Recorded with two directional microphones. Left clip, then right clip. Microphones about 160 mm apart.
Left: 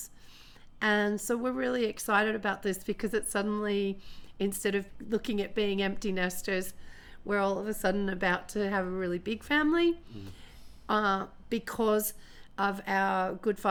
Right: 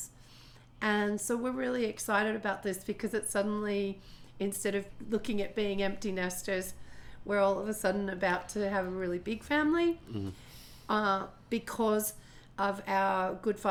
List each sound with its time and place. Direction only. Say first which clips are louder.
0.8 s a woman's voice: left 3 dB; 45° left (ahead or behind)